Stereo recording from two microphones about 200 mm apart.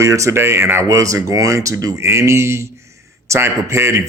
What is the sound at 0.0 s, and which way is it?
Speech, 15° right (ahead or behind).